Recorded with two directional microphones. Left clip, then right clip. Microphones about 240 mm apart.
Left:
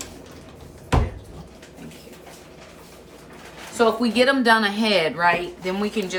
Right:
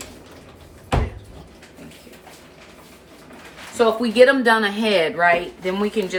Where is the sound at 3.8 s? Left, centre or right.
Left.